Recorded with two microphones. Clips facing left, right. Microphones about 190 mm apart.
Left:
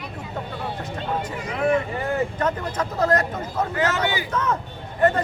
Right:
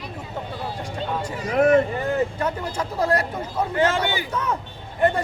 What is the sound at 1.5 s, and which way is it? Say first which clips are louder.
Speech: right 5 dB; 40° right (ahead or behind).